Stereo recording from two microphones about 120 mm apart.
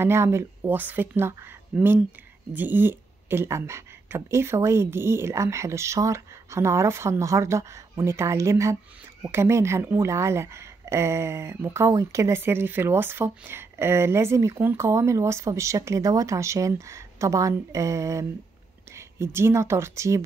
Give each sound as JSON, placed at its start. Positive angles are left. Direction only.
{"t": 0.0, "sound": "a woman's voice", "side_deg": -20}
{"t": 2.5, "sound": "a woman's voice", "side_deg": -15}